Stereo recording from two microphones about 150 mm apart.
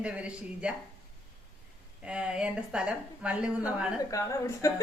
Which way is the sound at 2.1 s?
5° right (ahead or behind).